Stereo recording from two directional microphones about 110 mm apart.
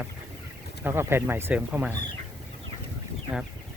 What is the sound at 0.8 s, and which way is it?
Speech, 20° right (ahead or behind).